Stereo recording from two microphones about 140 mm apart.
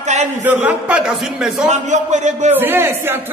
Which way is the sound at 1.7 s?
60° right (ahead or behind).